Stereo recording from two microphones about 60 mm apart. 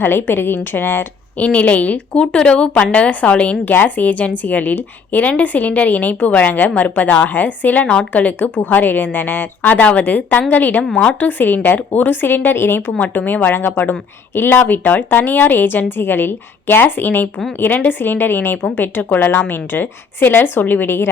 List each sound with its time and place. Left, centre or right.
0.0 s a woman's voice: left
1.4 s a woman's voice: left